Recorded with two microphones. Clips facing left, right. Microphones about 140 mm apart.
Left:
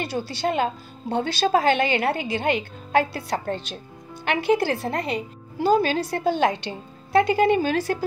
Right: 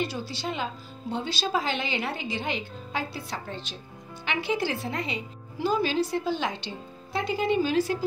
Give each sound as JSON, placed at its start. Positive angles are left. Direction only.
{"t": 0.0, "sound": "a woman's voice", "side_deg": 65}